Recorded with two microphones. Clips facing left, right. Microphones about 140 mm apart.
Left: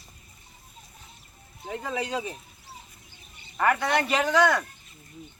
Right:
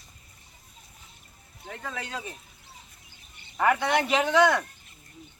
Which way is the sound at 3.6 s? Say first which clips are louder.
Even; 5° right (ahead or behind).